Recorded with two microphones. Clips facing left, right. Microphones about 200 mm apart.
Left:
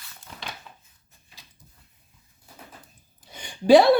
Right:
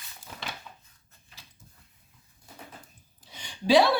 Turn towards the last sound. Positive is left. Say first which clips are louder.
# left 7 dB
turn(degrees=50)  # may be behind; listen again after turning